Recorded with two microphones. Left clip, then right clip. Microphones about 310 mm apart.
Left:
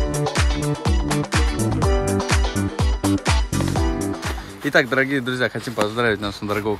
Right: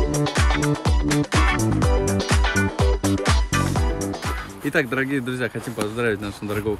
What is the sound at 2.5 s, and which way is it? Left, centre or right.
Music, centre.